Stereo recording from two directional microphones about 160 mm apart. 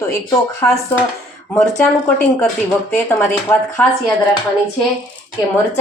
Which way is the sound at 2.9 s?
15° left (ahead or behind).